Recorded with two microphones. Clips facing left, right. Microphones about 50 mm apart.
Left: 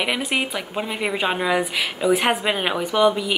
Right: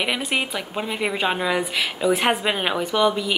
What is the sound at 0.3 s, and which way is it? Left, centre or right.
Speech, centre.